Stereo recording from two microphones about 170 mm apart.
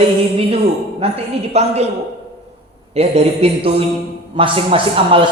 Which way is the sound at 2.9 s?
35° right (ahead or behind).